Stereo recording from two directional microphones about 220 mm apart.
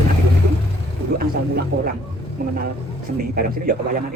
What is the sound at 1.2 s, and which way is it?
Speech, 45° right (ahead or behind).